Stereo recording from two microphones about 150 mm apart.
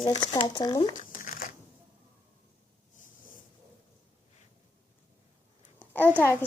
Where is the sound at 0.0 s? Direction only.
35° left (ahead or behind).